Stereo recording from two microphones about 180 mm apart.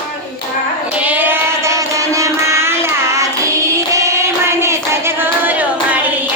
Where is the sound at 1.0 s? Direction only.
10° right (ahead or behind).